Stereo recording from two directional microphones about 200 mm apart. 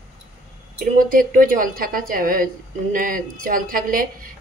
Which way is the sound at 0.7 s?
45° right (ahead or behind).